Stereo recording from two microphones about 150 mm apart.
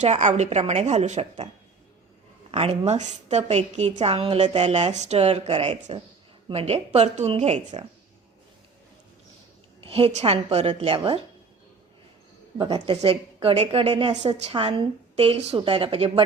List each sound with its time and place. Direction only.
0.0 s a woman's voice: 55° right (ahead or behind)
0.6 s a woman's voice: 40° right (ahead or behind)
2.5 s a woman's voice: 40° right (ahead or behind)
4.6 s a woman's voice: 45° right (ahead or behind)
9.9 s a woman's voice: 45° right (ahead or behind)
12.5 s a woman's voice: 30° right (ahead or behind)